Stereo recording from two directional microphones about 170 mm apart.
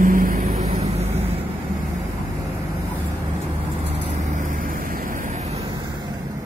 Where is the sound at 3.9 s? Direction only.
40° right (ahead or behind).